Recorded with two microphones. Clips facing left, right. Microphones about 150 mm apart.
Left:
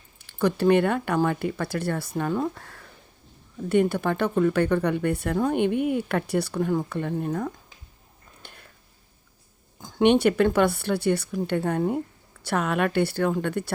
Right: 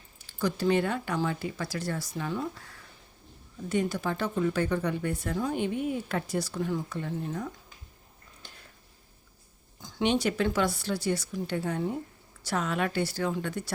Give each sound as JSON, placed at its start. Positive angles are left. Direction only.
{"t": 0.2, "sound": "speech", "side_deg": 60}
{"t": 8.4, "sound": "a sound", "side_deg": 60}
{"t": 9.8, "sound": "speech", "side_deg": 60}